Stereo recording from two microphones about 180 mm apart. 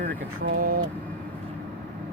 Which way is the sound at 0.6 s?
55° right (ahead or behind).